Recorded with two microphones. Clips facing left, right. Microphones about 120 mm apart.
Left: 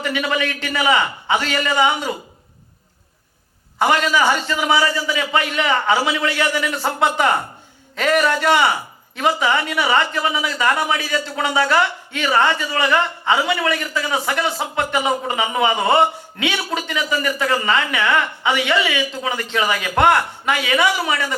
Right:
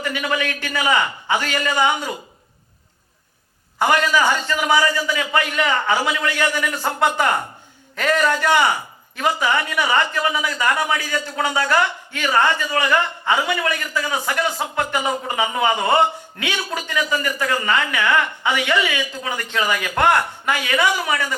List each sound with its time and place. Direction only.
0.0 s a man's voice: 20° left (ahead or behind)
3.8 s a man's voice: 20° left (ahead or behind)